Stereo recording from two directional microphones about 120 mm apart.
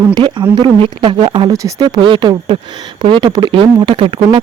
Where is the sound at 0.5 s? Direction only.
40° right (ahead or behind).